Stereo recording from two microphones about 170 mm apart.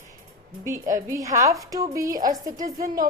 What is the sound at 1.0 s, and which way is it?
Speech, 20° right (ahead or behind).